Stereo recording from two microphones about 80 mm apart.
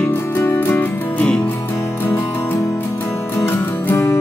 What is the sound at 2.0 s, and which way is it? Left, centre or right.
Music, left.